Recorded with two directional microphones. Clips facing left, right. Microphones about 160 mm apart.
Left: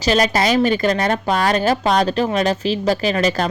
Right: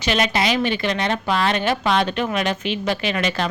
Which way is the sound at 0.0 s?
35° left (ahead or behind).